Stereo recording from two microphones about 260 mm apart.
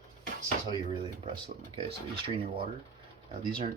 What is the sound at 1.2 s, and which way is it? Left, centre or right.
Speech, right.